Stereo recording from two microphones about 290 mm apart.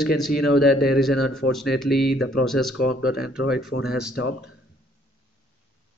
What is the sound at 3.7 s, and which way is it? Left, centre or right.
Speech, left.